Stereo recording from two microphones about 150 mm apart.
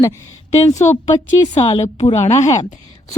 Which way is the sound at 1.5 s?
40° left (ahead or behind).